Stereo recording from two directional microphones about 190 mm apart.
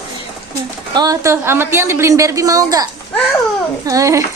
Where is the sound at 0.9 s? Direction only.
20° right (ahead or behind).